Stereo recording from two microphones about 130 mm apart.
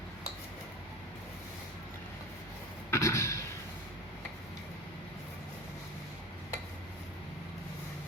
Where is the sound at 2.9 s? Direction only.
20° left (ahead or behind).